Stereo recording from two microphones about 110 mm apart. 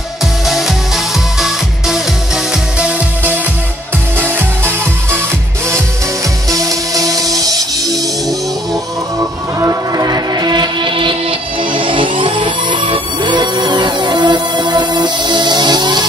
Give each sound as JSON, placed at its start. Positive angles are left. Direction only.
{"t": 0.5, "sound": "music", "side_deg": 0}
{"t": 4.2, "sound": "music", "side_deg": -20}
{"t": 6.5, "sound": "music", "side_deg": -30}
{"t": 9.6, "sound": "music", "side_deg": -30}